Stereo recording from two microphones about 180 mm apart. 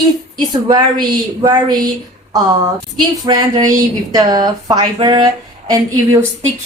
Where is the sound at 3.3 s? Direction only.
25° right (ahead or behind).